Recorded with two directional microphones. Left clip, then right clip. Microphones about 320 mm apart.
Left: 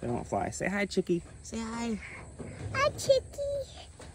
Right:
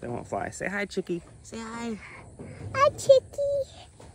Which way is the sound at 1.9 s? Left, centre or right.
Centre.